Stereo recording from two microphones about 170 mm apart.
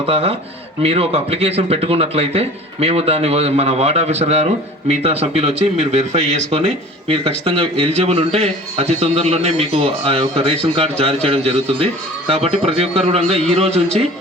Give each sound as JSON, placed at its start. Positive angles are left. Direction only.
{"t": 0.0, "sound": "a man's voice", "side_deg": -35}